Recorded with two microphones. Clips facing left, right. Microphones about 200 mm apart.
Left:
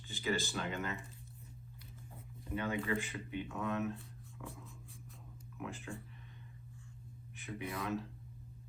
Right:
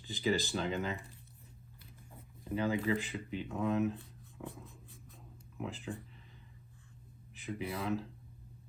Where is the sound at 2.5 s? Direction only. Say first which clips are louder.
Right 5 dB; 30° right (ahead or behind).